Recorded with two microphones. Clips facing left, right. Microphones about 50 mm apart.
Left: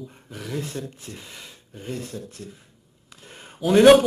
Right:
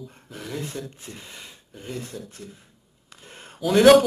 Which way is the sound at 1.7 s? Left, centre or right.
Centre.